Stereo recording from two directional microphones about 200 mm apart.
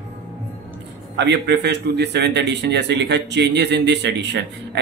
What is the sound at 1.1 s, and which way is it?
A man's voice, 60° right (ahead or behind).